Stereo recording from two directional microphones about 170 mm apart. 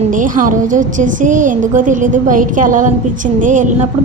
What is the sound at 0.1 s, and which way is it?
A woman's voice, 50° right (ahead or behind).